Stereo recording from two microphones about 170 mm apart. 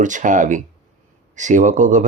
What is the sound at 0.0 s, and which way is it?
A man's voice, 50° right (ahead or behind).